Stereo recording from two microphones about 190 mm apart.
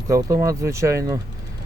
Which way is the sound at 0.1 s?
15° right (ahead or behind).